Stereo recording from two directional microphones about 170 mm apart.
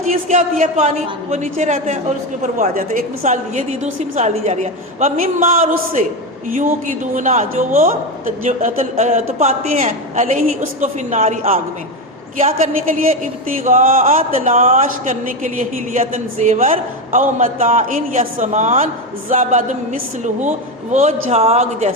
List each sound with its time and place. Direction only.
0.1 s a man's voice: 45° right (ahead or behind)
13.5 s a man's voice: 50° right (ahead or behind)